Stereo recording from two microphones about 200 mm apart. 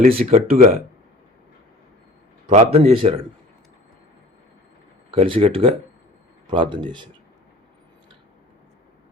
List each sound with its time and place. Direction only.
0.2 s speech: 35° right (ahead or behind)
2.5 s a man's voice: 30° right (ahead or behind)
5.1 s a man's voice: 25° right (ahead or behind)